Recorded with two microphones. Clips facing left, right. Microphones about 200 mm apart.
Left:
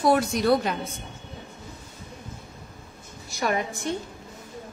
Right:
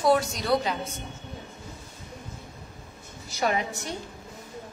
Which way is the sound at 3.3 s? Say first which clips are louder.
Even; 55° left (ahead or behind).